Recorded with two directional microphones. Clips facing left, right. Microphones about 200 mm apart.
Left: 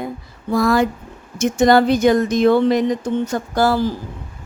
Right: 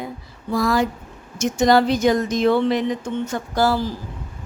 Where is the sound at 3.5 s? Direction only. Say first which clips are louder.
Left 3 dB; 55° left (ahead or behind).